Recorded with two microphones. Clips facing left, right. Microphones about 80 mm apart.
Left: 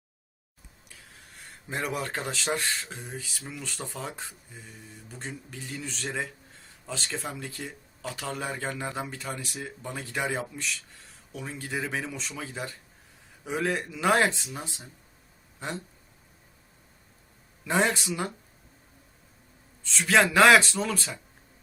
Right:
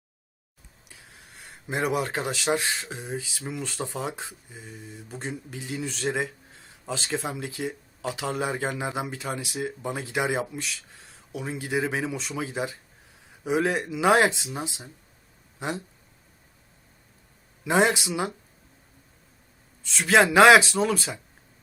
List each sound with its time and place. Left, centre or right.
1.6 s speech: centre
17.6 s speech: centre
20.1 s speech: centre